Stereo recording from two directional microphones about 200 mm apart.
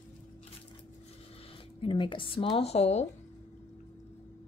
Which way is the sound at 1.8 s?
25° left (ahead or behind).